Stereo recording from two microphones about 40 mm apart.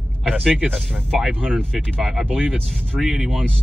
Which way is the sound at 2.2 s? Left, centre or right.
Right.